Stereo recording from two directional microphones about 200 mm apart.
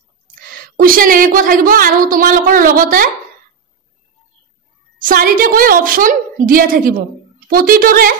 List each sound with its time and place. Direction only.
0.5 s a woman's voice: 45° right (ahead or behind)
5.0 s a woman's voice: 45° right (ahead or behind)